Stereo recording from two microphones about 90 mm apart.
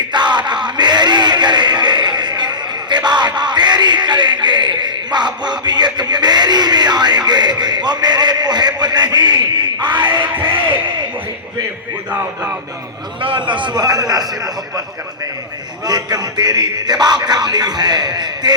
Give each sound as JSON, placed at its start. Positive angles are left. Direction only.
{"t": 0.1, "sound": "a sound", "side_deg": -60}
{"t": 13.2, "sound": "speech", "side_deg": -70}
{"t": 15.9, "sound": "speech", "side_deg": -50}